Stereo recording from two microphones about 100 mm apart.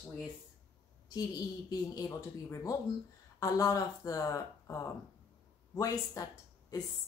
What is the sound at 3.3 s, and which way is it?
A woman's voice, 35° left (ahead or behind).